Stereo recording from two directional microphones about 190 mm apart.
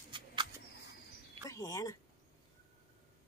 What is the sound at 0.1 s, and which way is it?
Mouse, 25° right (ahead or behind).